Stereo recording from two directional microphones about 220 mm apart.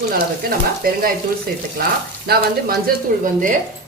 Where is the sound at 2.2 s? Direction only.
45° right (ahead or behind).